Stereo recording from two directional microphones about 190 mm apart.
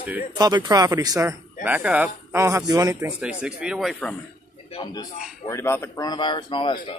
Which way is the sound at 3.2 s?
5° right (ahead or behind).